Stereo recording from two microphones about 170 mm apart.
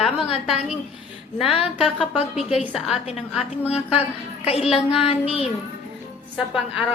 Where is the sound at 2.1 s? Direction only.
35° left (ahead or behind).